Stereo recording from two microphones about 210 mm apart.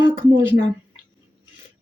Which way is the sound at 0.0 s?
20° right (ahead or behind).